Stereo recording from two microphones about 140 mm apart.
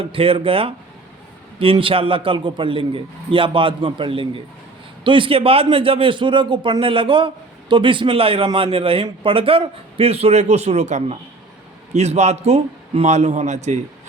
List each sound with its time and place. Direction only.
0.0 s a man's voice: 40° right (ahead or behind); by 13.7 s 55° right (ahead or behind)